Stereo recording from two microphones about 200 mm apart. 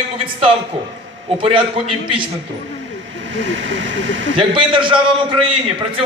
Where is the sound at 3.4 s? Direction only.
65° right (ahead or behind).